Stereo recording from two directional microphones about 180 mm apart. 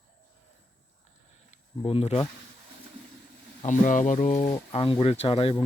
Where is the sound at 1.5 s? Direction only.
35° left (ahead or behind).